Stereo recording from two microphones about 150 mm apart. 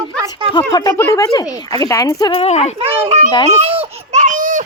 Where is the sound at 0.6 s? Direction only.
20° left (ahead or behind).